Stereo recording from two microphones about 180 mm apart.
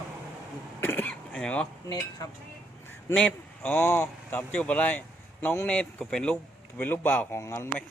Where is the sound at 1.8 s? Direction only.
20° left (ahead or behind).